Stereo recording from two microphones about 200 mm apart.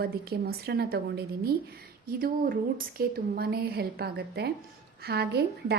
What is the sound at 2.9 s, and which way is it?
A woman's voice, 50° right (ahead or behind).